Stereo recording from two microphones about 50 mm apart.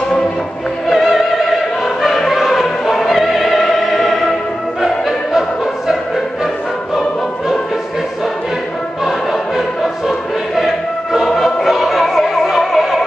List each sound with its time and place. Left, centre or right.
0.8 s music: centre
10.0 s choir: centre
11.7 s opera: centre